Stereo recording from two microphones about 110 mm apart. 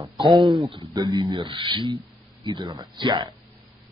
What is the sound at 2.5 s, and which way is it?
Speech, 35° right (ahead or behind).